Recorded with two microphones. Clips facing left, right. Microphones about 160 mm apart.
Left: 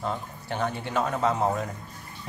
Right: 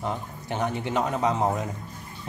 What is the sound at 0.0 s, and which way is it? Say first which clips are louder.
A man's voice: right 1 dB; 15° right (ahead or behind).